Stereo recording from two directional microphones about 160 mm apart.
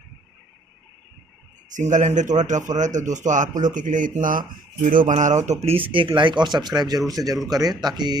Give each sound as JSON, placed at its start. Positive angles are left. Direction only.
{"t": 1.7, "sound": "a man's voice", "side_deg": -50}